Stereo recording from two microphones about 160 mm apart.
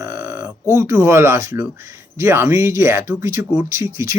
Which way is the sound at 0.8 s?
20° right (ahead or behind).